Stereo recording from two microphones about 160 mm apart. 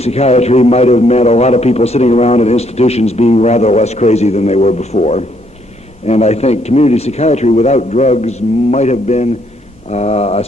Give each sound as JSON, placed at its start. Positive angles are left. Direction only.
{"t": 0.0, "sound": "a man's voice", "side_deg": 40}